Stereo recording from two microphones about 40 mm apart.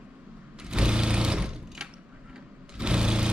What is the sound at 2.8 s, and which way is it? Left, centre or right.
Lawn mower, right.